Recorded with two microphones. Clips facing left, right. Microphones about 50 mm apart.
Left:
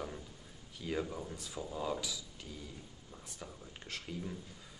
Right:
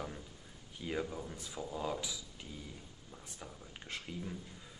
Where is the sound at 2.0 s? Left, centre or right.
Right.